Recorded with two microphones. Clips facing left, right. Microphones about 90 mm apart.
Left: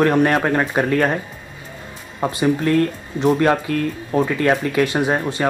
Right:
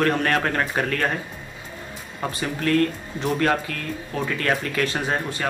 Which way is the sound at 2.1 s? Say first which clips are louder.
Left 9 dB; 20° left (ahead or behind).